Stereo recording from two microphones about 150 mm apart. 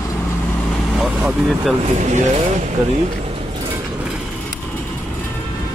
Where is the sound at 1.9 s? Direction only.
50° right (ahead or behind).